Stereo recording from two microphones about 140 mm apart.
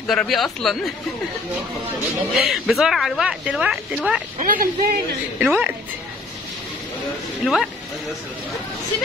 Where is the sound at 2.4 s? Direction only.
Centre (ahead or behind).